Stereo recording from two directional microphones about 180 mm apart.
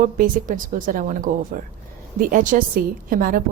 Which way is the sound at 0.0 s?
50° right (ahead or behind).